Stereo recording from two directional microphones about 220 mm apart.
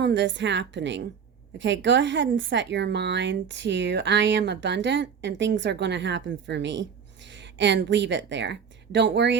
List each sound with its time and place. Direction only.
0.0 s a woman's voice: 55° right (ahead or behind)